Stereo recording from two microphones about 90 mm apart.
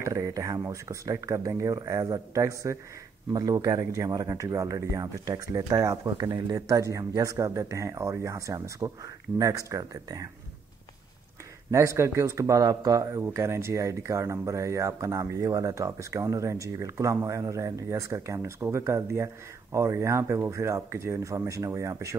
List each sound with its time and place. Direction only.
0.0 s speech: 35° right (ahead or behind)
11.7 s speech: 35° right (ahead or behind)